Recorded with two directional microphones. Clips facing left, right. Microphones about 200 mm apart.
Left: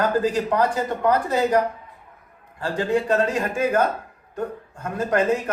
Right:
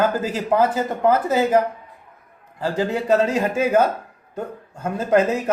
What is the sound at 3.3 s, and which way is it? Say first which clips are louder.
Speech: right 3 dB; 25° right (ahead or behind).